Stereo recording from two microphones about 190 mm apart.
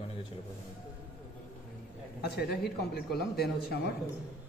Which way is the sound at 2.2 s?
60° left (ahead or behind).